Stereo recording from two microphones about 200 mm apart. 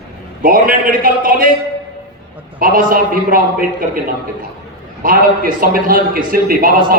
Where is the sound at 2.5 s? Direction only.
45° right (ahead or behind).